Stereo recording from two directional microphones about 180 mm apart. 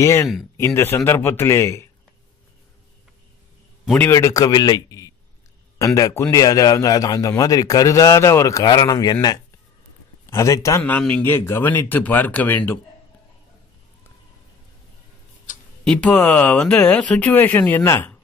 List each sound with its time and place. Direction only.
0.0 s a man's voice: 15° left (ahead or behind)
3.8 s a man's voice: 5° left (ahead or behind)
4.1 s a man's voice: 20° left (ahead or behind)
15.8 s a man's voice: 5° left (ahead or behind)